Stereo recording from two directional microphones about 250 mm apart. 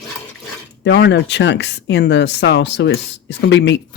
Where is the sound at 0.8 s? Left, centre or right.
Left.